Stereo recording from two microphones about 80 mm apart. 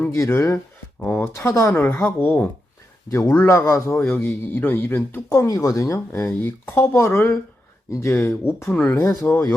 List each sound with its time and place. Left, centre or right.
0.1 s speech: left
0.9 s speech: centre
1.2 s a man's voice: left
5.3 s speech: left
6.4 s a man's voice: left
8.7 s a man's voice: left